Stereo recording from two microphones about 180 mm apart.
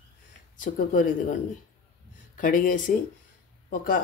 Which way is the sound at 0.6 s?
50° left (ahead or behind).